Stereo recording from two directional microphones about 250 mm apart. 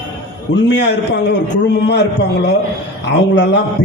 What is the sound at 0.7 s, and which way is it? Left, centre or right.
A man's voice, left.